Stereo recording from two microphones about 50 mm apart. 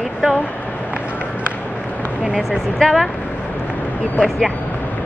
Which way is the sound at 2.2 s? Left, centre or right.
Centre.